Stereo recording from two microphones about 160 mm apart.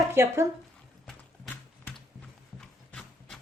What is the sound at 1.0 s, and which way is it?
Horse, 5° left (ahead or behind).